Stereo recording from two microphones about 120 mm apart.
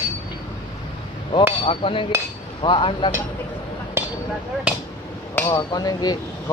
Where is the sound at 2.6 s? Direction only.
40° left (ahead or behind).